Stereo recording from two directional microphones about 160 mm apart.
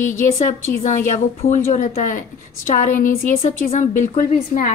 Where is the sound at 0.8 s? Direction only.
50° left (ahead or behind).